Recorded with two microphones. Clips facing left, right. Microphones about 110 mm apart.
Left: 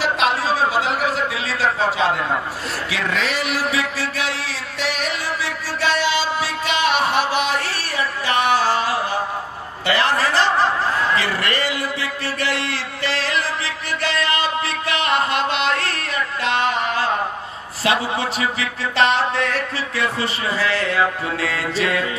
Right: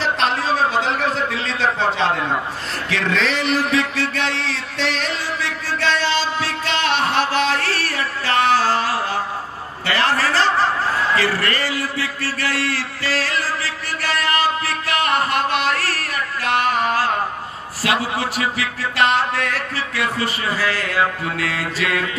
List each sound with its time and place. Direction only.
0.8 s a sound: 5° left (ahead or behind); by 17.0 s 25° left (ahead or behind)
17.8 s music: 25° left (ahead or behind)
20.0 s a man's voice: 25° left (ahead or behind)
21.4 s music: 30° left (ahead or behind)